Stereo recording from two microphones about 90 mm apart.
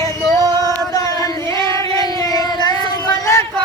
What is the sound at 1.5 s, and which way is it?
Singing, 35° left (ahead or behind).